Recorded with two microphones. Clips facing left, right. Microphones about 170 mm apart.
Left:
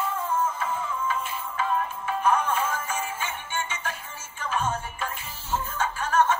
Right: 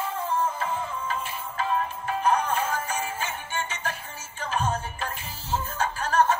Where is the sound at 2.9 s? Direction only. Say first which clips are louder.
Right 1 dB; 40° right (ahead or behind).